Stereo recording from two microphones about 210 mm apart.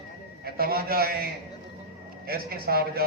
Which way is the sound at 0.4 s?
45° right (ahead or behind).